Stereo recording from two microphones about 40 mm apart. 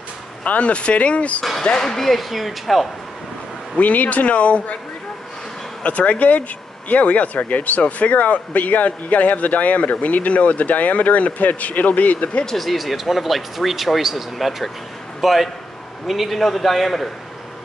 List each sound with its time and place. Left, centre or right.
0.4 s speech: left
1.8 s speech: centre
3.7 s speech: left
5.9 s speech: left
12.5 s a man's voice: centre